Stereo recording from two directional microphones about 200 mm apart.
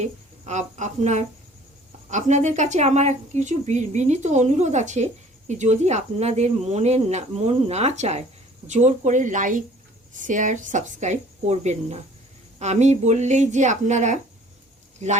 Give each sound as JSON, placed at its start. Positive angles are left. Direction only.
{"t": 0.0, "sound": "a woman's voice", "side_deg": -35}